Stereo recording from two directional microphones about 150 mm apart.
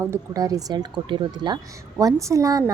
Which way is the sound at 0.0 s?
20° right (ahead or behind).